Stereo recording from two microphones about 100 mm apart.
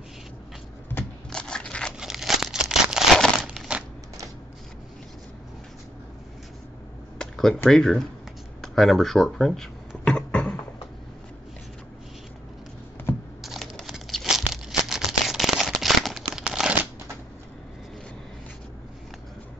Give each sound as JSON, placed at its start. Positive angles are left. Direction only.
{"t": 1.3, "sound": "crackle", "side_deg": 10}
{"t": 2.0, "sound": "crumpling", "side_deg": -5}
{"t": 3.6, "sound": "coin", "side_deg": 5}
{"t": 7.2, "sound": "speech", "side_deg": 5}
{"t": 8.5, "sound": "a sound", "side_deg": 0}
{"t": 13.1, "sound": "computer keyboard", "side_deg": 20}
{"t": 13.4, "sound": "a sound", "side_deg": 0}